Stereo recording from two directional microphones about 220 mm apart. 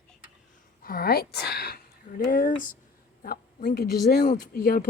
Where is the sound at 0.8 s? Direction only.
40° left (ahead or behind).